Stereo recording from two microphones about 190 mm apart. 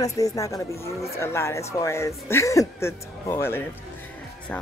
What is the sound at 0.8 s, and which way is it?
Speech, 35° left (ahead or behind).